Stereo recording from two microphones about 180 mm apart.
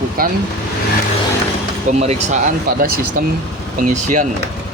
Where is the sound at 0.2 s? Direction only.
55° right (ahead or behind).